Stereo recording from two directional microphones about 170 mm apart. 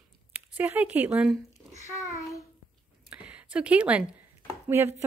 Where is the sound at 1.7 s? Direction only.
20° left (ahead or behind).